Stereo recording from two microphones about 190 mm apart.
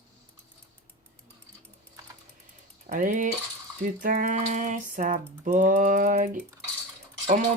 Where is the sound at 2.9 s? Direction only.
40° right (ahead or behind).